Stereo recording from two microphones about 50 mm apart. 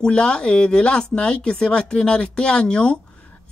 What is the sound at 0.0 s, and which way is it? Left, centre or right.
A woman's voice, centre.